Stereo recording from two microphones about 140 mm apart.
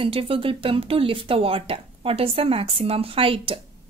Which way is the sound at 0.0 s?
40° right (ahead or behind).